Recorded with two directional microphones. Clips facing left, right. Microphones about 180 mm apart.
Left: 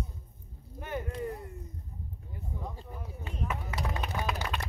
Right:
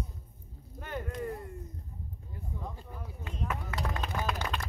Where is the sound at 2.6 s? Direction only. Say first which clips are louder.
Left 1 dB; 10° left (ahead or behind).